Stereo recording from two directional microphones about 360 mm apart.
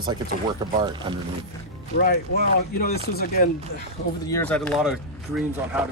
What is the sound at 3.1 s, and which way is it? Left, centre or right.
Speech, left.